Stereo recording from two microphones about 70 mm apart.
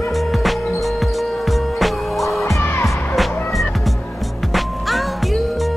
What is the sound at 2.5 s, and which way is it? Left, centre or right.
Music, left.